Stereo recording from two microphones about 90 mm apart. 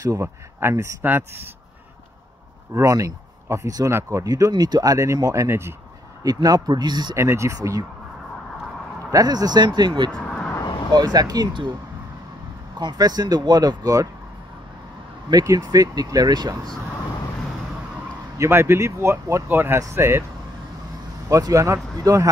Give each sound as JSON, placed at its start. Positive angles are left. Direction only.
{"t": 0.0, "sound": "speech", "side_deg": -40}
{"t": 0.6, "sound": "speech", "side_deg": -30}
{"t": 2.7, "sound": "speech", "side_deg": -35}
{"t": 6.2, "sound": "speech", "side_deg": -45}
{"t": 7.2, "sound": "speech", "side_deg": -30}
{"t": 9.1, "sound": "speech", "side_deg": -45}
{"t": 10.1, "sound": "vehicle", "side_deg": 10}
{"t": 10.9, "sound": "speech", "side_deg": -50}
{"t": 12.7, "sound": "speech", "side_deg": -50}
{"t": 15.3, "sound": "speech", "side_deg": -50}
{"t": 18.4, "sound": "speech", "side_deg": -30}
{"t": 21.3, "sound": "speech", "side_deg": -40}